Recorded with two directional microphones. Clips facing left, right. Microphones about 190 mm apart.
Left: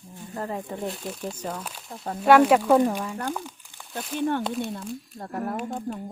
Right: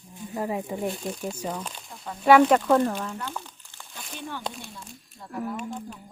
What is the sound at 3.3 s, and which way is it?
Crumpling, 10° left (ahead or behind).